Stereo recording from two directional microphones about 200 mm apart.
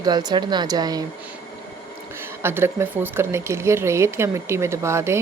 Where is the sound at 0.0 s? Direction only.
20° right (ahead or behind).